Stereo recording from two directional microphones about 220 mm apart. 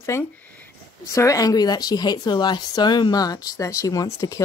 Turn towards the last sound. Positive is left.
turn(degrees=15)  # may be behind; listen again after turning